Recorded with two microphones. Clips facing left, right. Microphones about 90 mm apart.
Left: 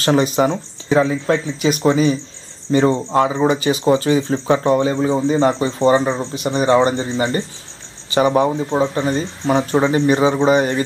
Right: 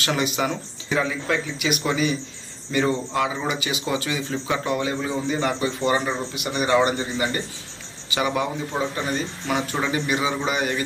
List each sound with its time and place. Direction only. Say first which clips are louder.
0.0 s speech: left 8 dB; 35° left (ahead or behind)